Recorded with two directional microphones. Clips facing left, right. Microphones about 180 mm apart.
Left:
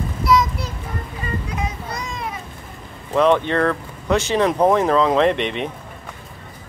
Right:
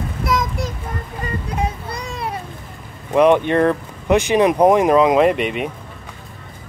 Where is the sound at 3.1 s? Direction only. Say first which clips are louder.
Right 3 dB; 15° right (ahead or behind).